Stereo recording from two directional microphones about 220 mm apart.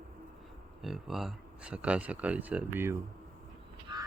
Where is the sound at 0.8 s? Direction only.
Centre (ahead or behind).